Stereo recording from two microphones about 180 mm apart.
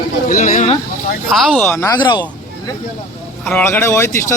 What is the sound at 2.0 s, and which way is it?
Speech, 25° left (ahead or behind).